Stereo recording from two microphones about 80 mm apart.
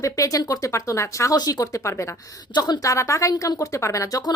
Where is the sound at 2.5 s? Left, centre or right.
Left.